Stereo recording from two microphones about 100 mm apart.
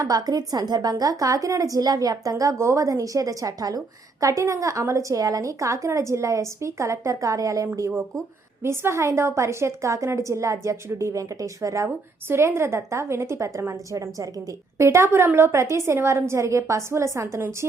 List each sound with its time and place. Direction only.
0.0 s a woman's voice: 40° right (ahead or behind)